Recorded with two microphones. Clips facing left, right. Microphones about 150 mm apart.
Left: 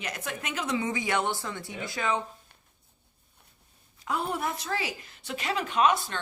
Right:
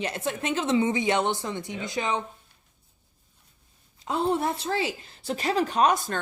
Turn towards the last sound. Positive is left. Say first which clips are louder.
# right 2 dB
turn(degrees=-45)  # may be behind; listen again after turning